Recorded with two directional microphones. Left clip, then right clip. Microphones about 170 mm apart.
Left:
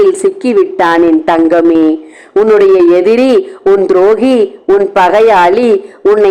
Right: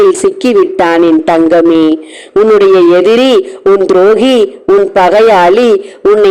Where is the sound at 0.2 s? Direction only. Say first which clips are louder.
Right 2 dB; 35° right (ahead or behind).